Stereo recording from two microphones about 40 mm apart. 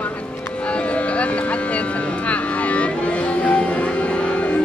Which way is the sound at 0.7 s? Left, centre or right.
Left.